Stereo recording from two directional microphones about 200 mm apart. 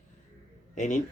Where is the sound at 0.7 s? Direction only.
40° left (ahead or behind).